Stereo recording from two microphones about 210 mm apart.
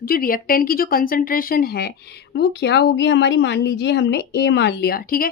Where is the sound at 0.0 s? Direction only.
45° left (ahead or behind).